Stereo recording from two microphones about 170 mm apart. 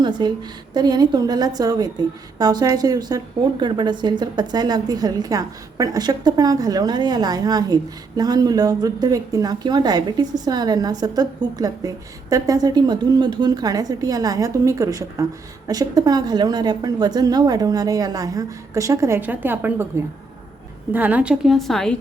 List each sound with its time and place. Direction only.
0.2 s a woman's voice: 25° right (ahead or behind)
20.9 s a woman's voice: 10° right (ahead or behind)